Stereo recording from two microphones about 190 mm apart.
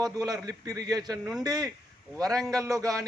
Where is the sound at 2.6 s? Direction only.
15° right (ahead or behind).